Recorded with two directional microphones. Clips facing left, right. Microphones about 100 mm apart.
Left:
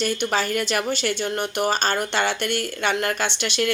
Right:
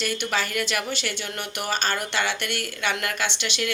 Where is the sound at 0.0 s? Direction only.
35° left (ahead or behind).